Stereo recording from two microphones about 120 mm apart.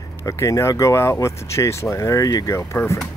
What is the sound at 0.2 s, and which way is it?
Speech, 25° left (ahead or behind).